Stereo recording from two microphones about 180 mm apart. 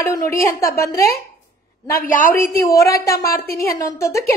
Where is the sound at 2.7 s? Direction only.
15° left (ahead or behind).